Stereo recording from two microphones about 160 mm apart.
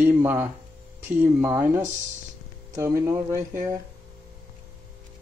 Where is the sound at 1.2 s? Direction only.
15° right (ahead or behind).